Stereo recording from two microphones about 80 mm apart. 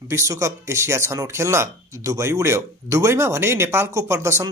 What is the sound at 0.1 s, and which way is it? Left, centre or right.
Speech, right.